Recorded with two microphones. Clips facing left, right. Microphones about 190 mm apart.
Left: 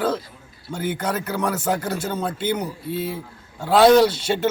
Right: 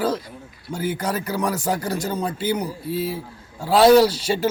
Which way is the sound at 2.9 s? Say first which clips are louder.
Right 2 dB; 35° right (ahead or behind).